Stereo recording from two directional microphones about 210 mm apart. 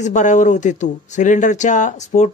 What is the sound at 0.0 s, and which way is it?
Speech, 35° left (ahead or behind).